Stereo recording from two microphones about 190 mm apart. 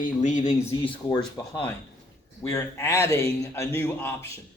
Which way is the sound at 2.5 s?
15° left (ahead or behind).